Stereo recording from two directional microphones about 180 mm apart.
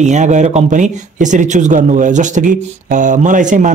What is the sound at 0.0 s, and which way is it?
Speech, 40° right (ahead or behind).